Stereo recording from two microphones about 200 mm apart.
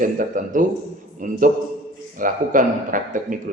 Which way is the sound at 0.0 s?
40° right (ahead or behind).